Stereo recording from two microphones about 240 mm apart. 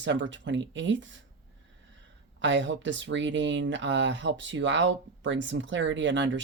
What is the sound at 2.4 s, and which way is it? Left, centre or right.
Speech, right.